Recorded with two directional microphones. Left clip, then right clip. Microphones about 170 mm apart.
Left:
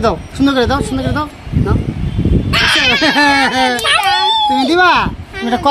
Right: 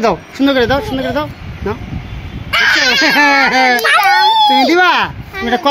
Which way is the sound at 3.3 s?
10° right (ahead or behind).